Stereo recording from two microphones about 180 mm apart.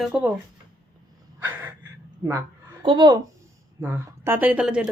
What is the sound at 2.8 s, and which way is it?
Speech, 25° right (ahead or behind).